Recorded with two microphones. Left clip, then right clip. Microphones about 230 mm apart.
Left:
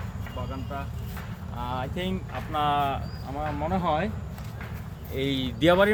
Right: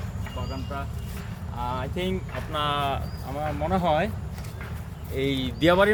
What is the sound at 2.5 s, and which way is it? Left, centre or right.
Speech, right.